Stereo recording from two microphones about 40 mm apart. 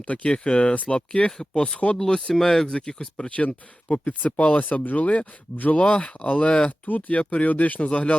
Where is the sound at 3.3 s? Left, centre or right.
Left.